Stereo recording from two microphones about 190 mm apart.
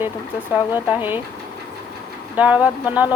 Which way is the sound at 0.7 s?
10° right (ahead or behind).